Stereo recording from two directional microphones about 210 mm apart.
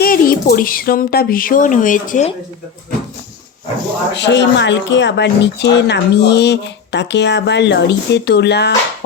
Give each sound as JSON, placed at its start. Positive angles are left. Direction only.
{"t": 0.0, "sound": "speech", "side_deg": 45}
{"t": 4.1, "sound": "speech", "side_deg": 55}